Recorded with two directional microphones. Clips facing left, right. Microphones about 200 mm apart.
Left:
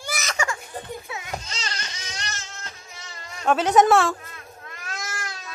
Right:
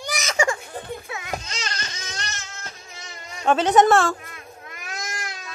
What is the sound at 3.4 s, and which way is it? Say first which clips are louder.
Speech: right 1 dB; 5° left (ahead or behind).